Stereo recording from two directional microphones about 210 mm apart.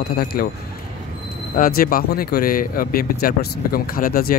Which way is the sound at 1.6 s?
45° left (ahead or behind).